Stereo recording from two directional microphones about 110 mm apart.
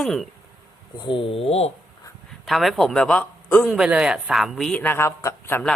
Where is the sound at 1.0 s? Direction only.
55° left (ahead or behind).